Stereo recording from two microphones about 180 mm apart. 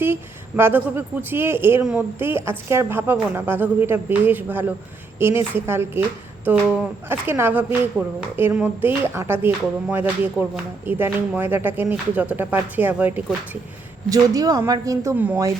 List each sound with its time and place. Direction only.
0.0 s a woman's voice: 10° right (ahead or behind)
14.1 s a woman's voice: 20° right (ahead or behind)